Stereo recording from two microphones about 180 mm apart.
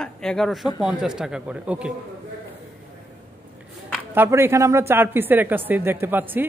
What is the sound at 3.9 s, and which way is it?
A woman's voice, 10° right (ahead or behind).